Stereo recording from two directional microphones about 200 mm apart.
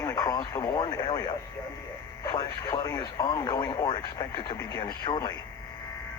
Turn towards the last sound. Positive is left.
turn(degrees=20)  # may be behind; listen again after turning